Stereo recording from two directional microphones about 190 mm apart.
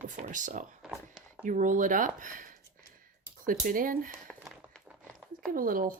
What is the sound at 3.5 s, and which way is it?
Speech, 45° right (ahead or behind).